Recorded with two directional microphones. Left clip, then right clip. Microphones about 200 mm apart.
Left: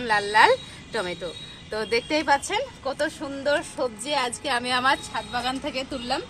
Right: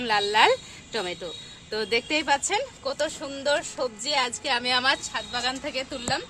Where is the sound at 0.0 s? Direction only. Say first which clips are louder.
Left 2 dB; 50° right (ahead or behind); by 5.5 s 25° right (ahead or behind).